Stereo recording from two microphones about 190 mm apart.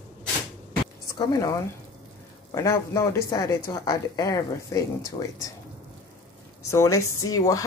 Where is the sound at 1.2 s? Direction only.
20° left (ahead or behind).